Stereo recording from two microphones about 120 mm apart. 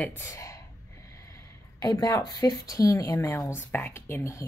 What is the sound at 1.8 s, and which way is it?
Speech, 30° left (ahead or behind).